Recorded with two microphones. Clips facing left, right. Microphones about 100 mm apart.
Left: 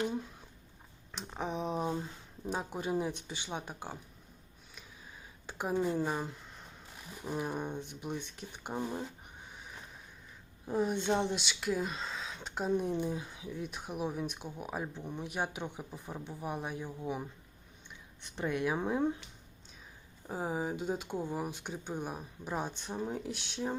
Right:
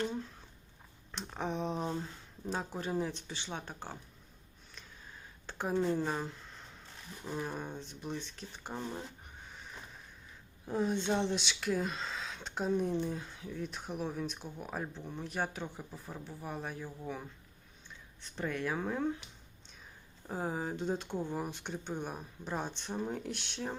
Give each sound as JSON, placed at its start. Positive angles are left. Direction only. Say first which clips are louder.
{"t": 0.0, "sound": "speech", "louder": "left 2 dB", "side_deg": 10}
{"t": 5.5, "sound": "speech", "louder": "even", "side_deg": 10}
{"t": 9.5, "sound": "a sound", "louder": "even", "side_deg": 5}
{"t": 10.7, "sound": "speech", "louder": "left 1 dB", "side_deg": 5}
{"t": 18.3, "sound": "speech", "louder": "left 3 dB", "side_deg": 15}
{"t": 20.2, "sound": "speech", "louder": "left 1 dB", "side_deg": 5}